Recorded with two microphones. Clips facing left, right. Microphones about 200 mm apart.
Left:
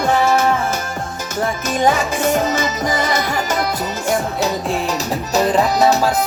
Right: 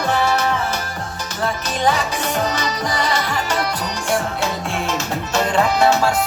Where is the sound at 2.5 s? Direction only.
45° left (ahead or behind).